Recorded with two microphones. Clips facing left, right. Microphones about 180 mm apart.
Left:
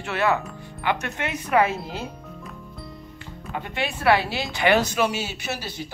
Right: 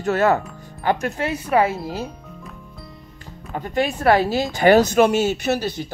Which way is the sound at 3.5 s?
40° right (ahead or behind).